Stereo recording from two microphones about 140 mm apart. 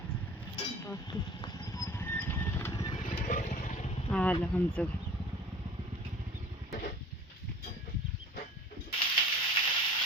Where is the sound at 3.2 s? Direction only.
65° left (ahead or behind).